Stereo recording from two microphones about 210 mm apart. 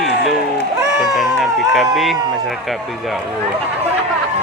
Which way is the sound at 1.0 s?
Centre (ahead or behind).